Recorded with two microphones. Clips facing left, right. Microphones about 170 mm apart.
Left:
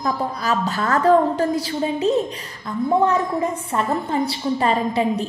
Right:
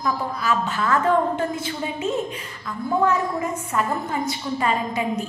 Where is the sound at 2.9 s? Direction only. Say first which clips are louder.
Left 2 dB; 25° left (ahead or behind).